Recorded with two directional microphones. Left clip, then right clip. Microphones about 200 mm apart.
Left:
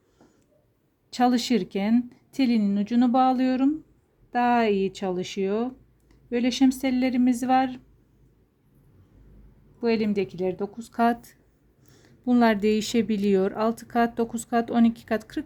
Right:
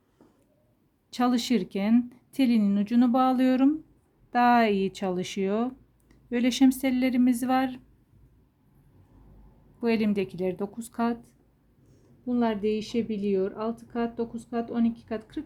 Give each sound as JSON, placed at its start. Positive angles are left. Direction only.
{"t": 1.1, "sound": "speech", "side_deg": 10}
{"t": 9.8, "sound": "speech", "side_deg": 0}
{"t": 10.9, "sound": "speech", "side_deg": 15}
{"t": 12.2, "sound": "speech", "side_deg": 35}